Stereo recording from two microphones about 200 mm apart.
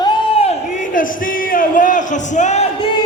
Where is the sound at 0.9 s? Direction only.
45° left (ahead or behind).